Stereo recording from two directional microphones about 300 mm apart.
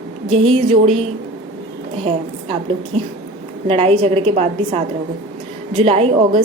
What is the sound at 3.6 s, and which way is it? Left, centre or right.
A woman's voice, centre.